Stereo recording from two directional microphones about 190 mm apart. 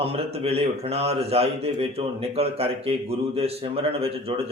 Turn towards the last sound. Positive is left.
turn(degrees=-30)  # may be behind; listen again after turning